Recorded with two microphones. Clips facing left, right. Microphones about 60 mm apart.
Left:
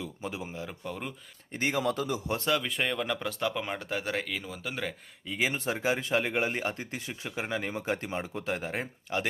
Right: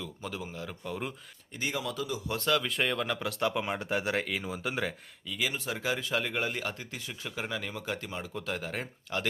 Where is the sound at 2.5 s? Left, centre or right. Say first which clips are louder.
Right 1 dB; centre.